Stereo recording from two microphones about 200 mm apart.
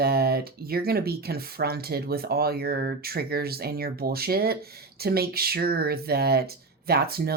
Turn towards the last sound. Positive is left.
turn(degrees=-50)  # may be behind; listen again after turning